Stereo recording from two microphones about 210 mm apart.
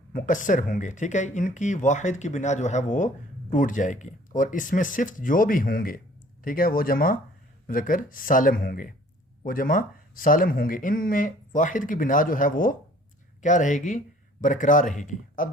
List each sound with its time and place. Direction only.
0.1 s speech: 40° left (ahead or behind)